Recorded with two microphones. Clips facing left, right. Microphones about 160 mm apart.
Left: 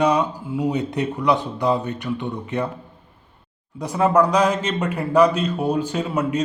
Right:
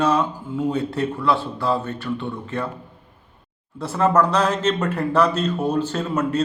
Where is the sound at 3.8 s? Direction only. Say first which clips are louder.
Left 1 dB; 15° left (ahead or behind).